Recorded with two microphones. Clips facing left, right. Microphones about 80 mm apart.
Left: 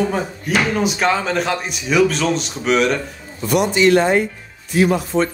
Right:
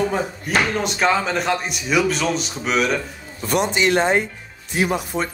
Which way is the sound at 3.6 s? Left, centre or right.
Right.